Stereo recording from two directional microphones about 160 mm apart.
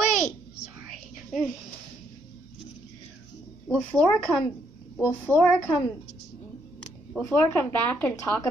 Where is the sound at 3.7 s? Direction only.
5° left (ahead or behind).